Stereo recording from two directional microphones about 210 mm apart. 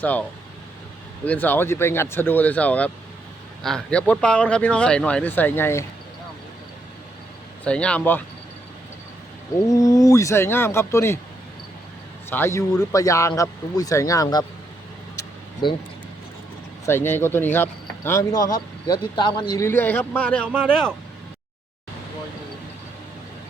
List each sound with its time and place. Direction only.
0.0 s speech: 10° left (ahead or behind)
7.6 s speech: 5° left (ahead or behind)
9.6 s speech: 15° left (ahead or behind)
12.3 s speech: 10° left (ahead or behind)
16.8 s speech: 10° left (ahead or behind)
20.5 s speech: 5° right (ahead or behind)